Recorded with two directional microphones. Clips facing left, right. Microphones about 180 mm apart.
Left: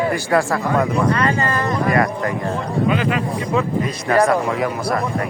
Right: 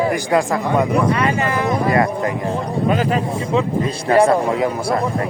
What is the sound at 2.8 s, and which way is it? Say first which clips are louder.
Speech: right 2 dB; 40° right (ahead or behind).